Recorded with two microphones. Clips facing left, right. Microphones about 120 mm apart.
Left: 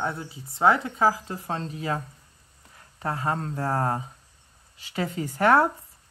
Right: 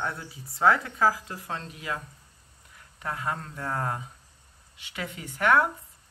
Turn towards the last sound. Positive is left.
turn(degrees=35)  # may be behind; listen again after turning